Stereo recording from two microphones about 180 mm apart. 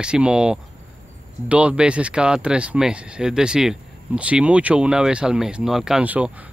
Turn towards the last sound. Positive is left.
turn(degrees=-10)  # may be behind; listen again after turning